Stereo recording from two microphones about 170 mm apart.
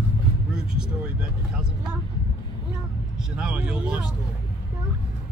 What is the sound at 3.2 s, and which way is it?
Speech, 5° right (ahead or behind).